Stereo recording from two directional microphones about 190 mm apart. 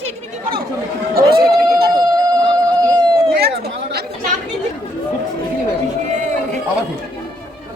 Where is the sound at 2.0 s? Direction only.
20° right (ahead or behind).